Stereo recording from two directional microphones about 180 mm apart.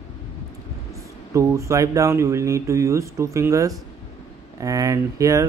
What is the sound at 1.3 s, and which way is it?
Speech, 15° right (ahead or behind).